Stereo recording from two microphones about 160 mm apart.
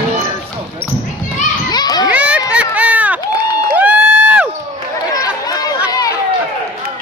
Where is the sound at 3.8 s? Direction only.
10° right (ahead or behind).